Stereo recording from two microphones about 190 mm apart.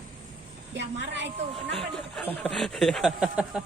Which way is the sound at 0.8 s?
70° right (ahead or behind).